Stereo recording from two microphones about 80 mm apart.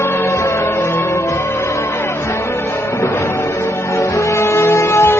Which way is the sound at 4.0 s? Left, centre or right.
Left.